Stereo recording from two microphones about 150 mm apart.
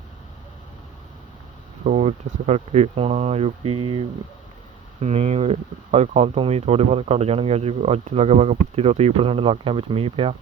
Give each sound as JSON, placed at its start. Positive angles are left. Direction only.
{"t": 1.8, "sound": "speech", "side_deg": -50}